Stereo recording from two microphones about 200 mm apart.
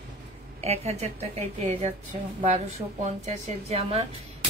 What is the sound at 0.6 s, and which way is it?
A woman's voice, 30° right (ahead or behind).